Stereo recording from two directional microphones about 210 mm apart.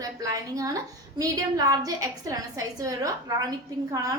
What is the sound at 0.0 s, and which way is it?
A woman's voice, 15° right (ahead or behind).